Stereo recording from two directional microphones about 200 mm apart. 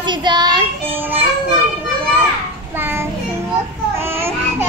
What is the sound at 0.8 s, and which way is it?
Children playing, 10° right (ahead or behind).